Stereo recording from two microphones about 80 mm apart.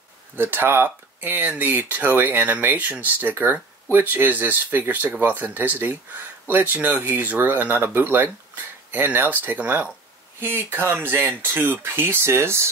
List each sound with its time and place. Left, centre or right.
0.4 s speech: right